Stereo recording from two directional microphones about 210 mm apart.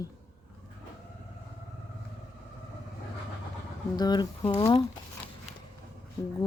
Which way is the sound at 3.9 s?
20° left (ahead or behind).